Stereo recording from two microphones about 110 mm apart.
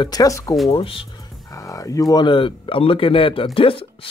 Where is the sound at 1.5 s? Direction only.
30° left (ahead or behind); by 4.1 s 55° left (ahead or behind).